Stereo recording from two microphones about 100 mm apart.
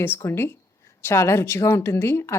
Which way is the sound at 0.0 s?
20° left (ahead or behind).